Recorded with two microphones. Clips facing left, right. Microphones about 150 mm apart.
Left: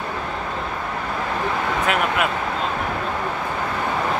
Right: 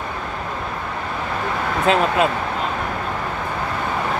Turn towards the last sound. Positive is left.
turn(degrees=-30)  # may be behind; listen again after turning